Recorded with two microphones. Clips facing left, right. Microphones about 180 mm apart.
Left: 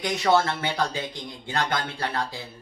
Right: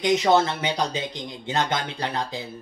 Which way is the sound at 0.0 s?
20° right (ahead or behind).